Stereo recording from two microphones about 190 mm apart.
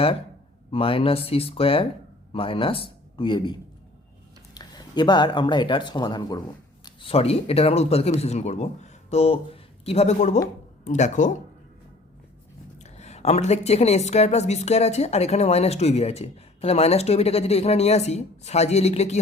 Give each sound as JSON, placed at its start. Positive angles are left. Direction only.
{"t": 0.7, "sound": "a man's voice", "side_deg": 30}
{"t": 12.8, "sound": "a woman's voice", "side_deg": 35}